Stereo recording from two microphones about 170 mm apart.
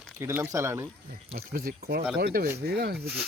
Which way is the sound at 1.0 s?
60° right (ahead or behind).